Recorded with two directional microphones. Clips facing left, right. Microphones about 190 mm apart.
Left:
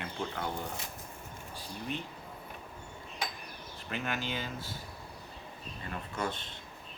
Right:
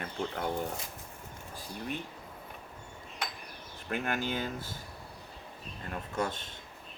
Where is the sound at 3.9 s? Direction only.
50° right (ahead or behind).